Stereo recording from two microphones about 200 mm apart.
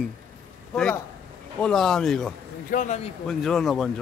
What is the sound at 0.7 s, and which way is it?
A man's voice, 5° left (ahead or behind).